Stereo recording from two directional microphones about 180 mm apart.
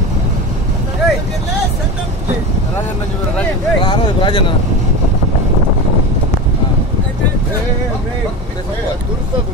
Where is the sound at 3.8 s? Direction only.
30° left (ahead or behind).